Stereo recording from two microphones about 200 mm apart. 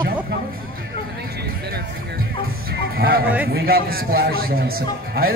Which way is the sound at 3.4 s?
50° right (ahead or behind).